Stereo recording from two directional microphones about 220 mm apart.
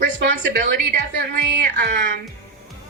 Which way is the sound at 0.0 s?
45° right (ahead or behind).